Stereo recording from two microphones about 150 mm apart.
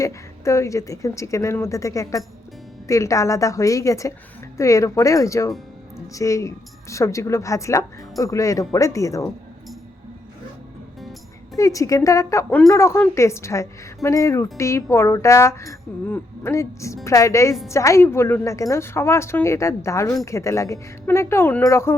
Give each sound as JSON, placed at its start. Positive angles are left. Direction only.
{"t": 0.0, "sound": "speech", "side_deg": 20}
{"t": 11.5, "sound": "speech", "side_deg": 20}